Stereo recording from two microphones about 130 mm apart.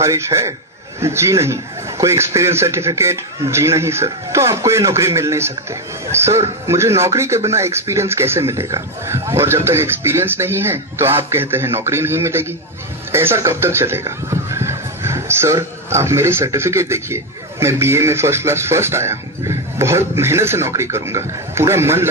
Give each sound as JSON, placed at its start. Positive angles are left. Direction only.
{"t": 0.0, "sound": "a man's voice", "side_deg": -20}